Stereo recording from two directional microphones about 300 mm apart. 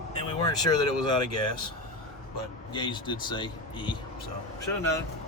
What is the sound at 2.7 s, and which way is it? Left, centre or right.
Speech, centre.